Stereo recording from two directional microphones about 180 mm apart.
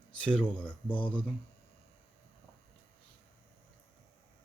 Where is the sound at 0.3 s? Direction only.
5° left (ahead or behind).